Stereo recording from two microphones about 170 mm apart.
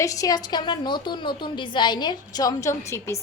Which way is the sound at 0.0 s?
20° left (ahead or behind).